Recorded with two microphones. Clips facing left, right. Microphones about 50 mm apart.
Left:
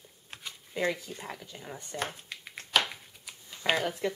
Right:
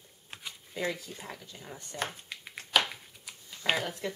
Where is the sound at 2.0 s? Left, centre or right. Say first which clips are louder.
Right 1 dB; centre.